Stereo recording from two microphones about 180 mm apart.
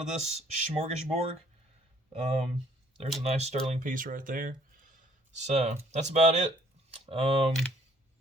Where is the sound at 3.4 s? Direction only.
40° right (ahead or behind).